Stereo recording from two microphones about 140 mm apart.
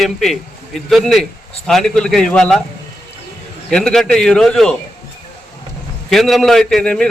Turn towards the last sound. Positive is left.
turn(degrees=5)  # may be behind; listen again after turning